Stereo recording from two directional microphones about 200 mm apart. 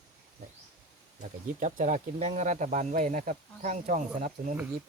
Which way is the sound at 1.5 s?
40° right (ahead or behind).